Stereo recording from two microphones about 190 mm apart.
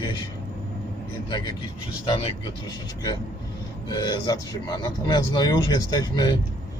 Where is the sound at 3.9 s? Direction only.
20° left (ahead or behind).